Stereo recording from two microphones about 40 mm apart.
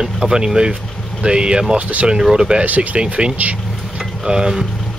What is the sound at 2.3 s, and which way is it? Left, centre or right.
Speech, right.